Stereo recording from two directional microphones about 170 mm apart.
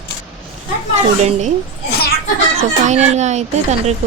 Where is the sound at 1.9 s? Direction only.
65° left (ahead or behind).